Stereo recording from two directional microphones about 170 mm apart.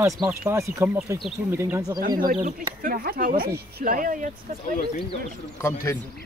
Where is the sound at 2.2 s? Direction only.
50° right (ahead or behind).